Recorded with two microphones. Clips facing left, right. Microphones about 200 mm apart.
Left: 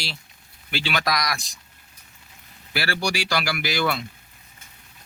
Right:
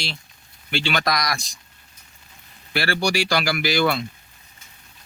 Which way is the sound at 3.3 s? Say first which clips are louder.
Right 4 dB; 30° right (ahead or behind).